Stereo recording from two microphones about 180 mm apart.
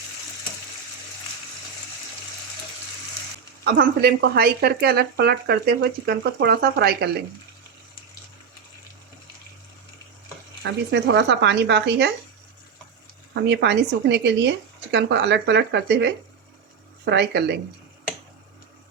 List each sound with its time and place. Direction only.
3.6 s speech: 60° right (ahead or behind)
10.6 s speech: 70° right (ahead or behind)
13.3 s speech: 70° right (ahead or behind)